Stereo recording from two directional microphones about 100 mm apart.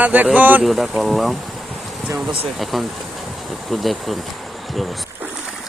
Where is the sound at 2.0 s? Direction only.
10° right (ahead or behind).